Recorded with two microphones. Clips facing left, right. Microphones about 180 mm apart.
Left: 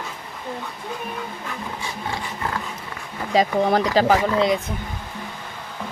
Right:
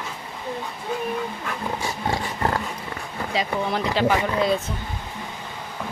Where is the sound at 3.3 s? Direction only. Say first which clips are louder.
Left 7 dB; 40° left (ahead or behind).